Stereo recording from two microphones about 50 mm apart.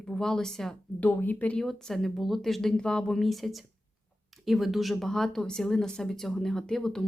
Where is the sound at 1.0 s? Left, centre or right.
Left.